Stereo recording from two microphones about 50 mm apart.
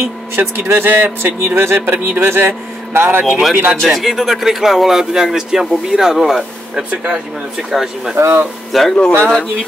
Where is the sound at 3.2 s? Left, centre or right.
Centre.